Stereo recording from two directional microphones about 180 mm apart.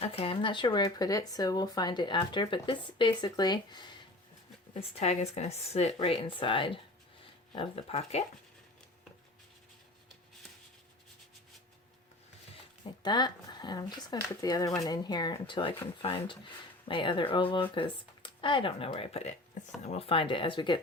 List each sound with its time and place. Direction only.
0.0 s speech: 30° left (ahead or behind)
12.8 s speech: 25° left (ahead or behind)